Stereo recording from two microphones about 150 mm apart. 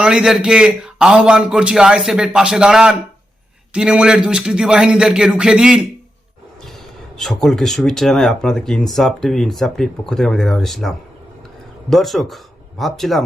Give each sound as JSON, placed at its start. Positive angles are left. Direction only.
{"t": 0.0, "sound": "speech", "side_deg": -5}
{"t": 7.2, "sound": "speech", "side_deg": 0}